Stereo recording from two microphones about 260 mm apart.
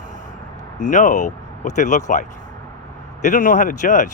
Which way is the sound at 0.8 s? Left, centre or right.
Left.